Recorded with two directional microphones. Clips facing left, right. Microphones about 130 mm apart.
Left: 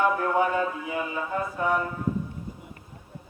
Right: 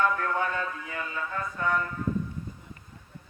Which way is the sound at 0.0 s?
15° left (ahead or behind).